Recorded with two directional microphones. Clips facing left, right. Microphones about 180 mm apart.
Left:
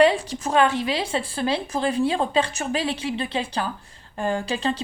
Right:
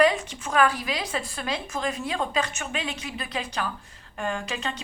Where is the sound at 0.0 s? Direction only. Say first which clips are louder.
Left 3 dB; 30° left (ahead or behind).